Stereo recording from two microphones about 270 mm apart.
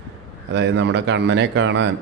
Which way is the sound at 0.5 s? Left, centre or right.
Right.